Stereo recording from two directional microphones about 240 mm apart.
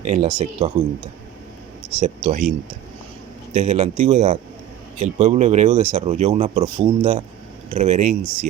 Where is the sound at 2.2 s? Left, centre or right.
Right.